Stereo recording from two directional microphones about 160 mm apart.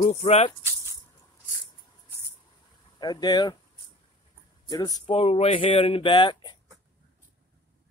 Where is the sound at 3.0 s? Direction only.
25° left (ahead or behind).